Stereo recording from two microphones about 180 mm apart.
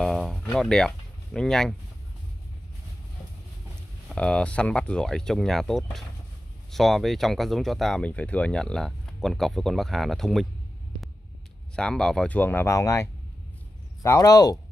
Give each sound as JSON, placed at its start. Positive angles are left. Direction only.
{"t": 0.0, "sound": "music", "side_deg": 0}
{"t": 4.1, "sound": "speech", "side_deg": 5}
{"t": 11.7, "sound": "speech", "side_deg": 5}